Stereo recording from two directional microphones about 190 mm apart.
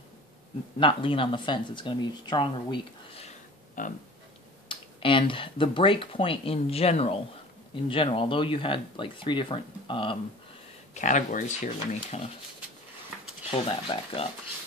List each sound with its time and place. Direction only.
0.7 s speech: 25° left (ahead or behind)
3.8 s a sound: 45° left (ahead or behind)
4.6 s speech: 25° left (ahead or behind)
11.0 s speech: 40° left (ahead or behind)
13.5 s speech: 30° left (ahead or behind)